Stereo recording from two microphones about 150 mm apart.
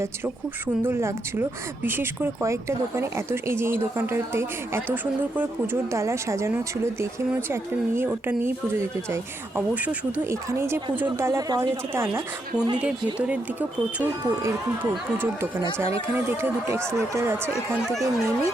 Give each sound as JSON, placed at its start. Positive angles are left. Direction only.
{"t": 0.9, "sound": "speech", "side_deg": -15}
{"t": 5.9, "sound": "a woman's voice", "side_deg": -20}
{"t": 9.6, "sound": "speech", "side_deg": -10}
{"t": 15.8, "sound": "speech", "side_deg": -15}